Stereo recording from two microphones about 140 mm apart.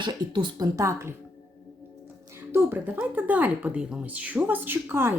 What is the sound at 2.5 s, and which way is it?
Speech, 15° right (ahead or behind).